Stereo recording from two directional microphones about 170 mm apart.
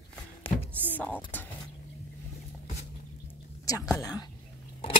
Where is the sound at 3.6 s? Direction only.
20° left (ahead or behind).